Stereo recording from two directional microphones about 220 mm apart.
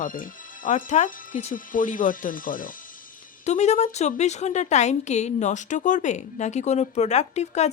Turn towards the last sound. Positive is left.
turn(degrees=30)  # may be behind; listen again after turning